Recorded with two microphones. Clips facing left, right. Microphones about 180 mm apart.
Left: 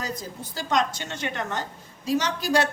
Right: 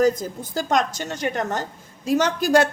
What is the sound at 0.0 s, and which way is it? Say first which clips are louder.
A woman's voice: right 13 dB; 45° right (ahead or behind).